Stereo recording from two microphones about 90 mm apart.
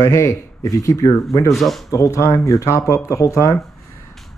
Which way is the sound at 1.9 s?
35° left (ahead or behind).